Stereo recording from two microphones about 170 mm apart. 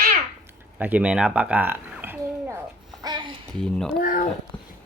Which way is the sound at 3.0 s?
25° right (ahead or behind).